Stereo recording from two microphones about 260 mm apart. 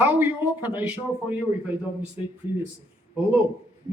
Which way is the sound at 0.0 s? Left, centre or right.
Centre.